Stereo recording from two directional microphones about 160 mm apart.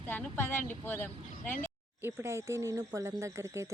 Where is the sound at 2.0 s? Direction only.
15° right (ahead or behind).